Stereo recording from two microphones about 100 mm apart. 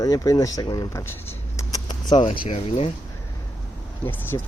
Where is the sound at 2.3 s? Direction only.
80° left.